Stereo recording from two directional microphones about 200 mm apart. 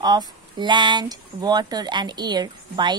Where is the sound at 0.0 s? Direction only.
20° right (ahead or behind).